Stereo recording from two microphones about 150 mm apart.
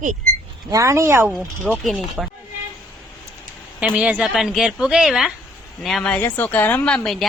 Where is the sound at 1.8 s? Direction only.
Centre (ahead or behind).